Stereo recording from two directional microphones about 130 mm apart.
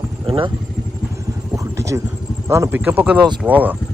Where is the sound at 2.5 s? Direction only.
20° right (ahead or behind).